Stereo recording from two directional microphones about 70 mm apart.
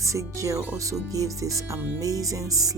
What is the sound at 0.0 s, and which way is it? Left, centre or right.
Speech, right.